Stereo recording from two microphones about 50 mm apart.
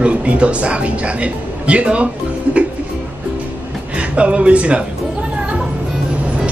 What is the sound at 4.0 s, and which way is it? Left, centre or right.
Speech, right.